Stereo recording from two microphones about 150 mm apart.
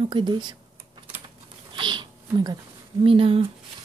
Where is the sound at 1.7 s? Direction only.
30° right (ahead or behind).